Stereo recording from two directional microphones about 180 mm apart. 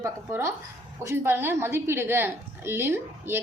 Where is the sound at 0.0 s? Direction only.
15° right (ahead or behind).